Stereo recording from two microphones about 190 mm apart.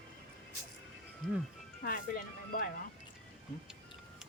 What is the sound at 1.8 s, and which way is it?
Speech, 50° left (ahead or behind).